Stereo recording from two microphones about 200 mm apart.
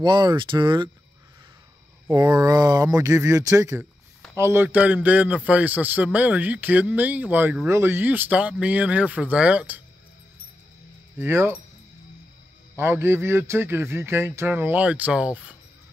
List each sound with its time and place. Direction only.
0.0 s speech: 20° right (ahead or behind)
2.0 s a man's voice: 20° right (ahead or behind)
11.1 s a man's voice: 10° right (ahead or behind)
12.7 s a man's voice: 10° right (ahead or behind)